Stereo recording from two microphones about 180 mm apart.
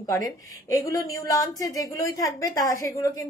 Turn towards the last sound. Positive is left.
turn(degrees=20)  # may be behind; listen again after turning